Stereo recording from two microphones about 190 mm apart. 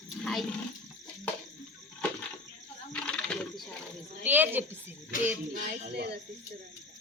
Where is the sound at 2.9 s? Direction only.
5° left (ahead or behind).